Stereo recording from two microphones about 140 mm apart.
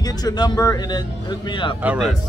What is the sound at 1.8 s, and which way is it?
Speech, 5° right (ahead or behind).